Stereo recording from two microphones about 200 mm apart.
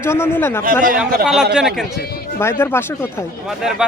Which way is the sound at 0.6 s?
45° right (ahead or behind).